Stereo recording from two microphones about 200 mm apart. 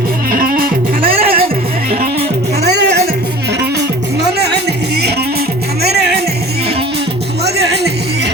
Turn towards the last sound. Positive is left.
turn(degrees=-55)  # may be behind; listen again after turning